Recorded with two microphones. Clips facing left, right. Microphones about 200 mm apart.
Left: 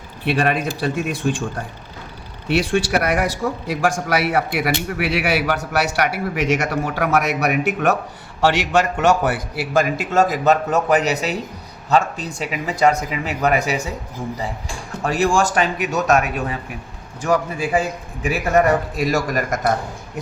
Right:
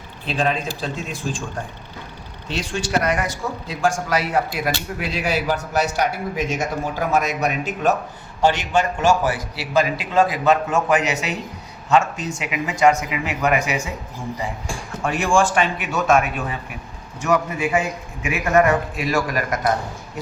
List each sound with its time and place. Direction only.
0.3 s a man's voice: 70° left (ahead or behind)
2.5 s a man's voice: 60° left (ahead or behind); by 13.9 s 35° left (ahead or behind)
15.0 s a man's voice: 40° left (ahead or behind)